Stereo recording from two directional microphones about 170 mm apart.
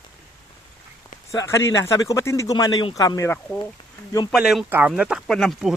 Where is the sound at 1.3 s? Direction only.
15° left (ahead or behind).